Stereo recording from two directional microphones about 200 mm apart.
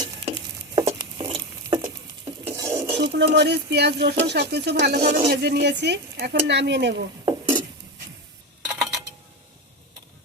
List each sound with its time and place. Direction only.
0.3 s stir: 25° right (ahead or behind)
2.4 s stir: 15° right (ahead or behind)
3.0 s speech: 60° right (ahead or behind)
8.6 s a sound: 5° right (ahead or behind)